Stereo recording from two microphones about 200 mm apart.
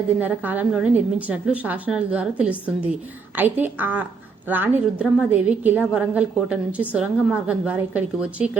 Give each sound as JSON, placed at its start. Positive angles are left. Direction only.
{"t": 0.2, "sound": "a woman's voice", "side_deg": -10}